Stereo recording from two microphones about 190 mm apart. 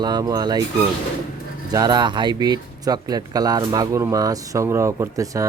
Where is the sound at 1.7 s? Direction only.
20° right (ahead or behind).